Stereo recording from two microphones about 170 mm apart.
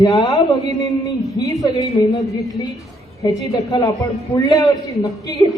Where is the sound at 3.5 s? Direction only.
20° left (ahead or behind).